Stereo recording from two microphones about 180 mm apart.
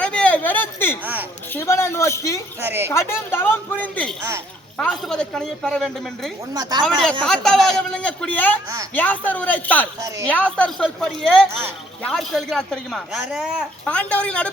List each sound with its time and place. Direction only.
0.0 s a sound: 5° left (ahead or behind)
1.0 s a woman's voice: 10° right (ahead or behind)
1.5 s speech: 15° left (ahead or behind)
2.6 s a woman's voice: 10° right (ahead or behind)
2.9 s speech: 15° left (ahead or behind)
6.5 s speech: 20° right (ahead or behind)
6.8 s speech: 5° left (ahead or behind)
13.8 s speech: 5° left (ahead or behind)